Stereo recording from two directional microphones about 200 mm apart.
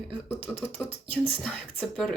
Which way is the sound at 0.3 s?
10° left (ahead or behind).